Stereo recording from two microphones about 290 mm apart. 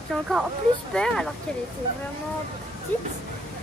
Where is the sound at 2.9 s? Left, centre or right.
Centre.